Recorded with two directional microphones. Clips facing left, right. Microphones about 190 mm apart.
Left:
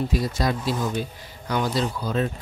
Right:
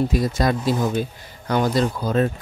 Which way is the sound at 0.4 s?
55° right (ahead or behind).